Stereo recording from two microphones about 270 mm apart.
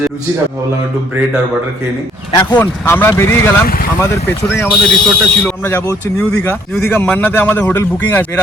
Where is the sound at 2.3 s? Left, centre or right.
Centre.